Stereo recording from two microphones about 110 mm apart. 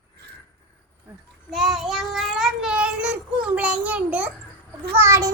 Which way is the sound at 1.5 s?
Centre (ahead or behind).